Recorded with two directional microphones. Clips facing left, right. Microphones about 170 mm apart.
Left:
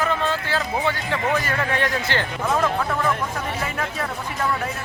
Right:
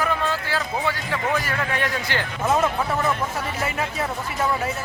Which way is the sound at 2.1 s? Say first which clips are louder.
Even; 10° right (ahead or behind).